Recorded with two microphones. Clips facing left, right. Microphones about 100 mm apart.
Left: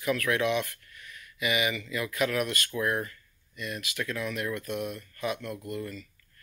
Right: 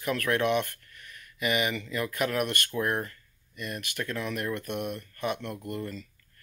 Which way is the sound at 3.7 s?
45° right (ahead or behind).